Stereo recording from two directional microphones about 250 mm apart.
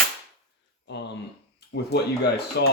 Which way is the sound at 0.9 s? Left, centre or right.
Left.